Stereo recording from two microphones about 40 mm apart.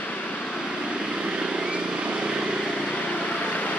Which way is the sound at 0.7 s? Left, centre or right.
Centre.